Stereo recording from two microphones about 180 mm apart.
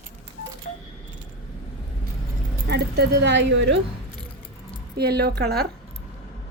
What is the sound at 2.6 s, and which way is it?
A woman's voice, 65° right (ahead or behind).